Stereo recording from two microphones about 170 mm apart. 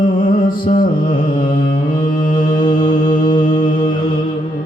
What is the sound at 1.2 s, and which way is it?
Mantra, 55° left (ahead or behind).